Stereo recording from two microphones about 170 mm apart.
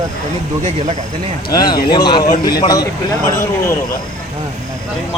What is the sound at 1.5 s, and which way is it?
Speech, 25° left (ahead or behind).